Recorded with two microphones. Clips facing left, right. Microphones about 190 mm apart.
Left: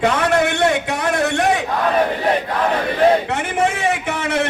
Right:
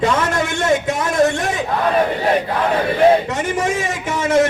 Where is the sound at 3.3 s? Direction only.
65° left (ahead or behind).